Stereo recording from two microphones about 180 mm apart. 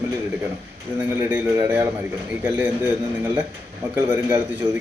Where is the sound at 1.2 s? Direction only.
10° right (ahead or behind).